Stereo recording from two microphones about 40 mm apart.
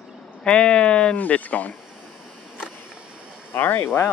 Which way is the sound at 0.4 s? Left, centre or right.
Left.